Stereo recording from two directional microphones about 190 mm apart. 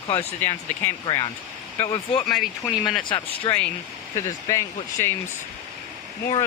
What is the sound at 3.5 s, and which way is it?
Speech, 25° left (ahead or behind).